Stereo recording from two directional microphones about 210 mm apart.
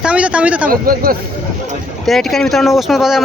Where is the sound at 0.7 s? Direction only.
45° right (ahead or behind).